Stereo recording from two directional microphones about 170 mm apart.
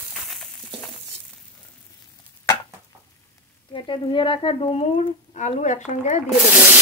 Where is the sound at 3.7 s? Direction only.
30° left (ahead or behind).